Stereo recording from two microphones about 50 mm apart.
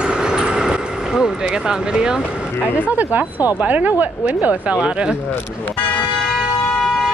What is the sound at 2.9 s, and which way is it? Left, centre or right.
Speech, right.